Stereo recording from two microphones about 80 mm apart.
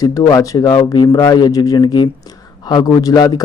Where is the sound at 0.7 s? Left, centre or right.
Left.